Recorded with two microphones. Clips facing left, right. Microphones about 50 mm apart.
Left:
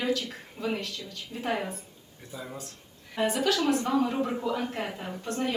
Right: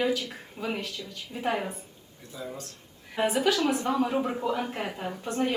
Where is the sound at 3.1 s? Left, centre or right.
Centre.